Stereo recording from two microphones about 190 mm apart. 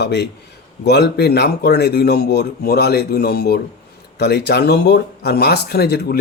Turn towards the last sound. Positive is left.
turn(degrees=55)  # may be behind; listen again after turning